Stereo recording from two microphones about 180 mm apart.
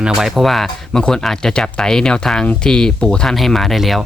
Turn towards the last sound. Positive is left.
turn(degrees=0)  # may be behind; listen again after turning